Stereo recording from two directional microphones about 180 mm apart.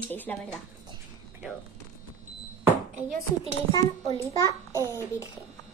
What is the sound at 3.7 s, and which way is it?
Speech, 20° left (ahead or behind).